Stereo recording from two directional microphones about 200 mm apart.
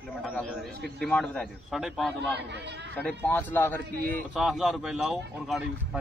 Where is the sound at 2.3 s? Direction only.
55° right (ahead or behind).